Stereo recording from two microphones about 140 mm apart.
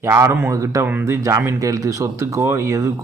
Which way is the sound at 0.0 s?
20° right (ahead or behind).